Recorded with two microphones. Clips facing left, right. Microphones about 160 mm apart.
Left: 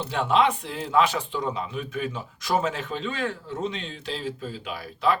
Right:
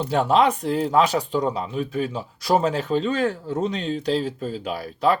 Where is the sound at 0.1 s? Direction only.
40° right (ahead or behind).